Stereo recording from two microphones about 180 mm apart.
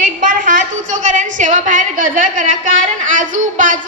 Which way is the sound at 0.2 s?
45° right (ahead or behind).